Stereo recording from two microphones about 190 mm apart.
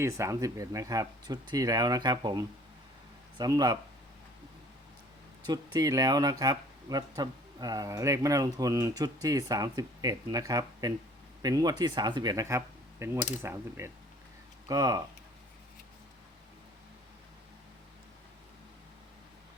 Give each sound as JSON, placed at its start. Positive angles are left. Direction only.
{"t": 0.0, "sound": "speech", "side_deg": -15}
{"t": 5.5, "sound": "speech", "side_deg": -20}